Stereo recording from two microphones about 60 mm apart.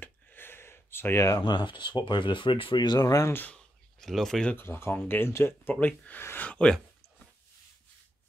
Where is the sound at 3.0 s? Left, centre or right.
Left.